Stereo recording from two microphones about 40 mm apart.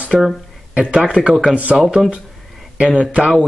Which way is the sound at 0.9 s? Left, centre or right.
Right.